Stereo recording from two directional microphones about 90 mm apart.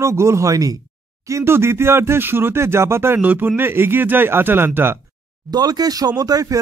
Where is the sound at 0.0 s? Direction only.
35° right (ahead or behind).